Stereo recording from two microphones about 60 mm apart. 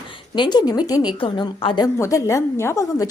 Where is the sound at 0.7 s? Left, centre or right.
Left.